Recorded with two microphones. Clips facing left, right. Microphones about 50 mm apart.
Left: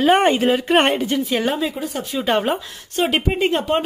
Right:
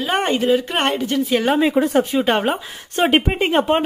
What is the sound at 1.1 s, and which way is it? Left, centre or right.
Speech, centre.